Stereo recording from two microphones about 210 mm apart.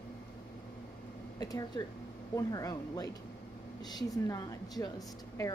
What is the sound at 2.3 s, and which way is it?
Speech, 15° left (ahead or behind).